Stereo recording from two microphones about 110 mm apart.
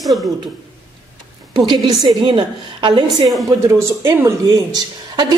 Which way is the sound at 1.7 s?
45° right (ahead or behind).